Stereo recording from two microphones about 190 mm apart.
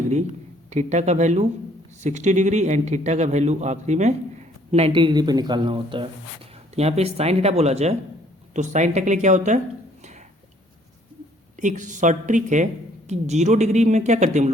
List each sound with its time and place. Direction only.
0.7 s a man's voice: 35° right (ahead or behind)
10.0 s a sound: 35° right (ahead or behind)
11.5 s a man's voice: 40° right (ahead or behind)